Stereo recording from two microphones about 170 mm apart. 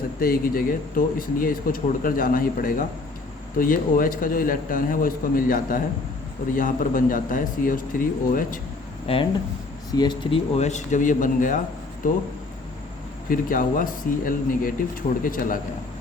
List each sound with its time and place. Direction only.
0.2 s a man's voice: 60° left (ahead or behind)
9.1 s a man's voice: 35° left (ahead or behind); by 12.2 s 50° left (ahead or behind)
13.3 s speech: 55° left (ahead or behind)